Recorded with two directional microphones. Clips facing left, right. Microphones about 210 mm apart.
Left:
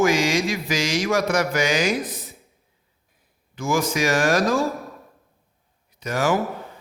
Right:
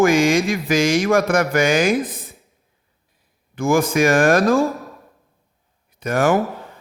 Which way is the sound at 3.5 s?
55° right (ahead or behind).